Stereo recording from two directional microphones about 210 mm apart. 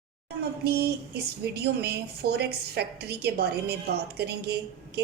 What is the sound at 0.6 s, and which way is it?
A woman's voice, 50° right (ahead or behind).